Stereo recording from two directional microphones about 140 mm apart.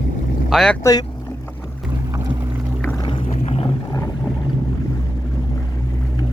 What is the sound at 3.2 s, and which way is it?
Boat, 50° left (ahead or behind).